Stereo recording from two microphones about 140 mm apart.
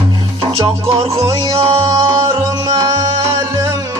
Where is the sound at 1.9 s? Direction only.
25° right (ahead or behind).